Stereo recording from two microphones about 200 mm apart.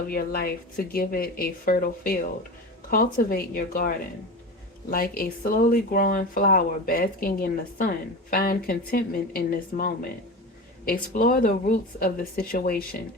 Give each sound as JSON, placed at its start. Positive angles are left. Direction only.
{"t": 0.1, "sound": "speech", "side_deg": 50}